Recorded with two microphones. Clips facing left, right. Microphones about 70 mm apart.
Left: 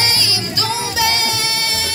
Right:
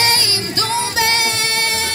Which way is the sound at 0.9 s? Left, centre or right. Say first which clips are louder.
Left 1 dB; right.